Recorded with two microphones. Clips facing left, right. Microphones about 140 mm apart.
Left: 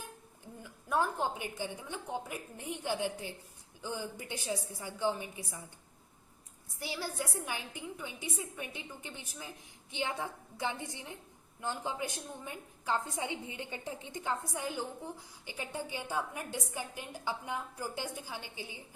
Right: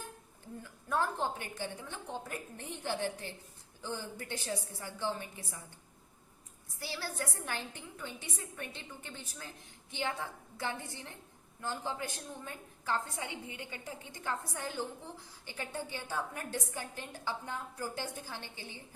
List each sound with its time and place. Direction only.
0.6 s a woman's voice: 15° left (ahead or behind)
6.7 s a woman's voice: 15° left (ahead or behind)